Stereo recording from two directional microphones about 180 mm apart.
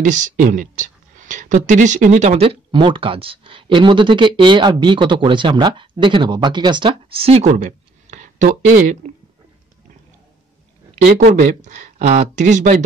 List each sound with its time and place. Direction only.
0.0 s speech: 45° right (ahead or behind)
11.2 s speech: 45° right (ahead or behind)